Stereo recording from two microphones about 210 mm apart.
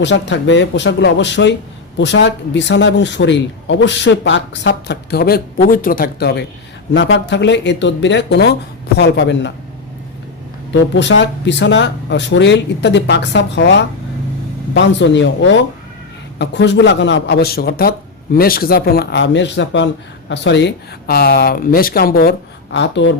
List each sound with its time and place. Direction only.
0.0 s speech: 55° left (ahead or behind)
10.7 s speech: 55° left (ahead or behind)